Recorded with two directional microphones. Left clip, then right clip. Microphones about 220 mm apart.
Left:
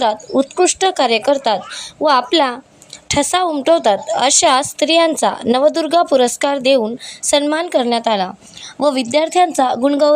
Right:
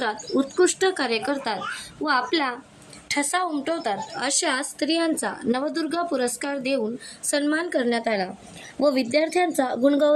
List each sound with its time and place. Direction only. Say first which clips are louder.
0.0 s a woman's voice: left 9 dB; 30° left (ahead or behind)